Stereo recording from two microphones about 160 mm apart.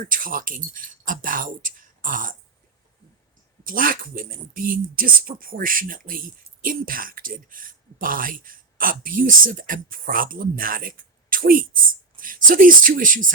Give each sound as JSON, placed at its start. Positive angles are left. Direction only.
{"t": 0.0, "sound": "speech", "side_deg": -60}
{"t": 3.6, "sound": "speech", "side_deg": -60}